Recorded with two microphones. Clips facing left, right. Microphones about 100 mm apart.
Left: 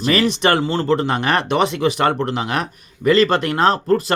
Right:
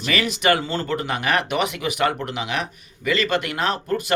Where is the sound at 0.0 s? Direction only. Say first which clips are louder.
Left 5 dB; 35° left (ahead or behind).